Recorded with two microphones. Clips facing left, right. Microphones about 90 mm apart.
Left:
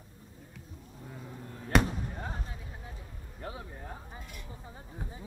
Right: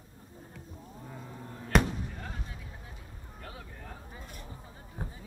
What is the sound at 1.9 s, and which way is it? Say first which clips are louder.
Basketball bounce: left 1 dB; 25° left (ahead or behind).